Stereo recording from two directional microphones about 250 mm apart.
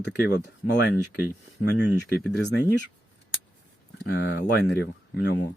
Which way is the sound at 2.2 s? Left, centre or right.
Left.